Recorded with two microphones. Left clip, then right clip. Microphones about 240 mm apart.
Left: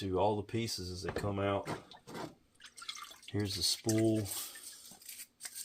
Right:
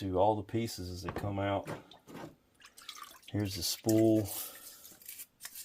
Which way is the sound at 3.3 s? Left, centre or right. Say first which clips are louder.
Left 1 dB; right.